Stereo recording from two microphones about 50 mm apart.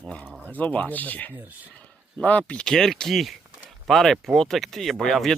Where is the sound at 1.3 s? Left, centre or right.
Right.